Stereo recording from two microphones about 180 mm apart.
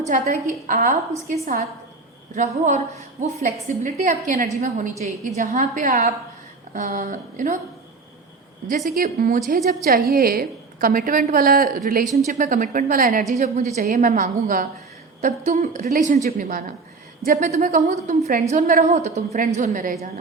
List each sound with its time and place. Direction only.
0.1 s a woman's voice: 40° right (ahead or behind)
9.0 s a woman's voice: 55° right (ahead or behind)